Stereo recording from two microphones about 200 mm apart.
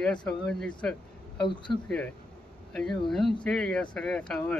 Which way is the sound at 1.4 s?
25° left (ahead or behind).